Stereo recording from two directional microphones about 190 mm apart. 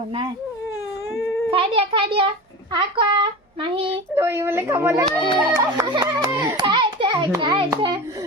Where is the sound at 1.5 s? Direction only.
30° right (ahead or behind).